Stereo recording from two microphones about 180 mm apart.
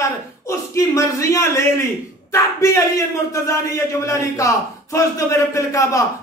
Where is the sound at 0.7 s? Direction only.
15° left (ahead or behind).